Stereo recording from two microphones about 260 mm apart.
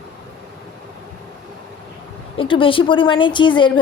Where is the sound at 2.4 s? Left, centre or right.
Centre.